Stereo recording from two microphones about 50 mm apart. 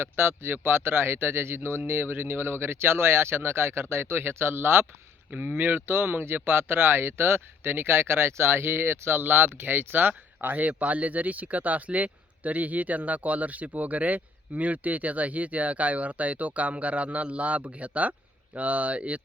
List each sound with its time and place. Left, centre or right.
0.0 s speech: right
5.3 s speech: right
5.5 s speech: right